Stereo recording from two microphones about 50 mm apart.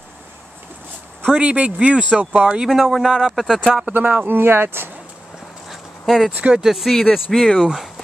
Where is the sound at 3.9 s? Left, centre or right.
Right.